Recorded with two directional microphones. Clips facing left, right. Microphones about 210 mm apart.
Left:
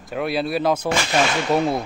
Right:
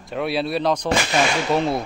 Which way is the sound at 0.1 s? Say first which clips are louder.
Even; centre (ahead or behind).